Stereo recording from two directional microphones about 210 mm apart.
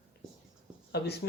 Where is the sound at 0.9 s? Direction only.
50° left (ahead or behind).